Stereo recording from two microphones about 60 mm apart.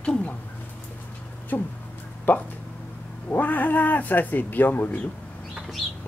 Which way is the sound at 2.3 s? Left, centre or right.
Left.